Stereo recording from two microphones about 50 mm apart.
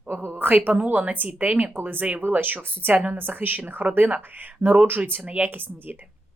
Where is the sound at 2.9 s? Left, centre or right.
Right.